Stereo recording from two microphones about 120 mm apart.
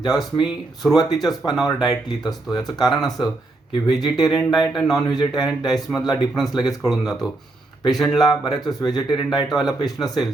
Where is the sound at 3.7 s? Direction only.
35° left (ahead or behind).